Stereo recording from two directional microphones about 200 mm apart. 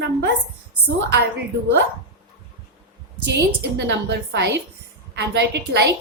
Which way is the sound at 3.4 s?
60° right (ahead or behind).